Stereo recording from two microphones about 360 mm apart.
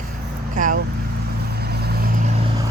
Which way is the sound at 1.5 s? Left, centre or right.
Right.